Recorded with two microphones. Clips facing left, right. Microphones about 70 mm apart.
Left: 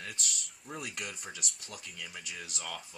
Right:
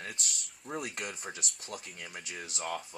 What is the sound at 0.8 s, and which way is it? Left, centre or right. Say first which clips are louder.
Speech: right 2 dB; right.